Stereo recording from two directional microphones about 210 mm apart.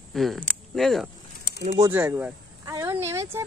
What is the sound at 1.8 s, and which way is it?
Speech, 10° right (ahead or behind).